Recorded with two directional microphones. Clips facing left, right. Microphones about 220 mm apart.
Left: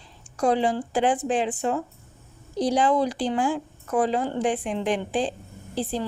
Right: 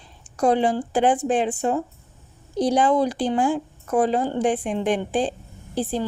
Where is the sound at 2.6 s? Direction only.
50° right (ahead or behind).